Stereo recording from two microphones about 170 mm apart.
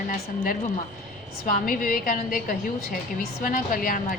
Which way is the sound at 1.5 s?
55° left (ahead or behind).